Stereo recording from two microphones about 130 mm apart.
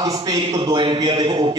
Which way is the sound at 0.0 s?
35° right (ahead or behind).